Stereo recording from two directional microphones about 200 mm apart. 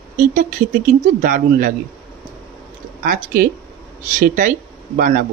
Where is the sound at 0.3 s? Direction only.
40° right (ahead or behind).